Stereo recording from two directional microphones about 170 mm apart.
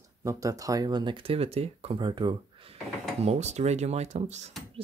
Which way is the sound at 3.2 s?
40° right (ahead or behind).